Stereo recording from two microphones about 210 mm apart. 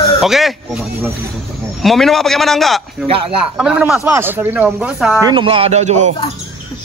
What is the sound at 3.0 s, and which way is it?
Speech, 25° right (ahead or behind).